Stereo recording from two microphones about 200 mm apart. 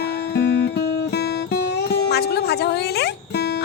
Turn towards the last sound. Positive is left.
turn(degrees=55)  # may be behind; listen again after turning